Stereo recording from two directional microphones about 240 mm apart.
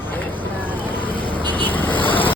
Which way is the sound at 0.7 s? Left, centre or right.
Centre.